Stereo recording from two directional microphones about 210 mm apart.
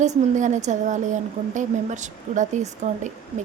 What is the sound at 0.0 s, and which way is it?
A woman's voice, 35° right (ahead or behind).